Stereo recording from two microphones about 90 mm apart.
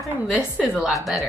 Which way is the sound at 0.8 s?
Centre (ahead or behind).